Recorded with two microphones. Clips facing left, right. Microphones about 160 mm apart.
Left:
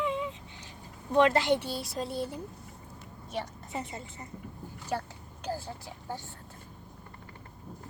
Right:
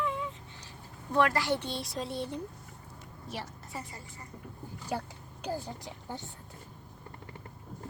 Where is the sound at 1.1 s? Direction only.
20° left (ahead or behind).